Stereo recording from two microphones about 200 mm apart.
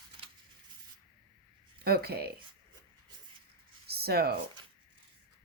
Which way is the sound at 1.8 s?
50° right (ahead or behind).